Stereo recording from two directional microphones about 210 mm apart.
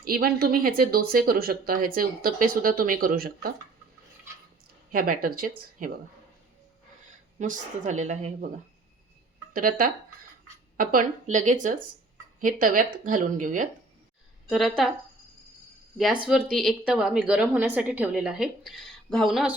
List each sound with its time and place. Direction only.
0.0 s speech: 45° right (ahead or behind)
4.9 s speech: 40° right (ahead or behind)
7.3 s speech: 35° right (ahead or behind)
9.5 s speech: 40° right (ahead or behind)
14.5 s a woman's voice: centre (ahead or behind)
16.0 s a woman's voice: 5° right (ahead or behind)